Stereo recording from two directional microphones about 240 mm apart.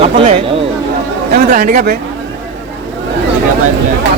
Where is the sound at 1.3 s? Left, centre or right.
Right.